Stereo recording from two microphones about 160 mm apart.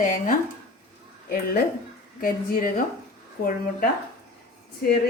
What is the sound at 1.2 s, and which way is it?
A woman's voice, 65° left (ahead or behind).